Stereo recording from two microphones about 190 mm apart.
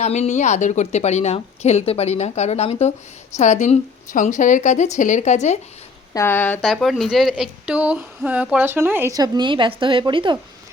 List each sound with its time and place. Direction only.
0.0 s a woman's voice: 35° left (ahead or behind)
6.1 s speech: 10° left (ahead or behind); by 10.3 s 25° right (ahead or behind)